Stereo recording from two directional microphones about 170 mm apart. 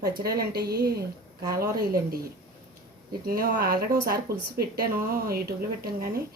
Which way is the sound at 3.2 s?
60° right (ahead or behind).